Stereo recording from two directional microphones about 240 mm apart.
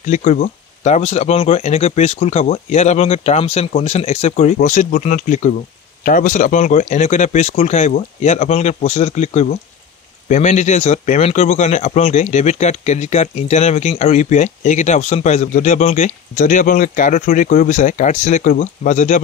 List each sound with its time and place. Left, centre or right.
0.0 s speech: left